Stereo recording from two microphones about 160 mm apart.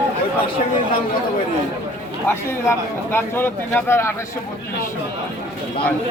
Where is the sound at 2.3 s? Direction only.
15° left (ahead or behind).